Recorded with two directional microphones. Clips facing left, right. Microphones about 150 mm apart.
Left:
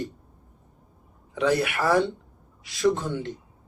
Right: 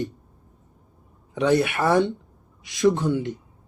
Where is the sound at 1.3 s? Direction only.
25° right (ahead or behind).